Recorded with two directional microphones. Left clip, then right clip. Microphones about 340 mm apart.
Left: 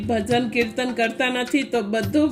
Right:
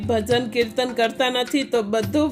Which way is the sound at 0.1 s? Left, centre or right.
Centre.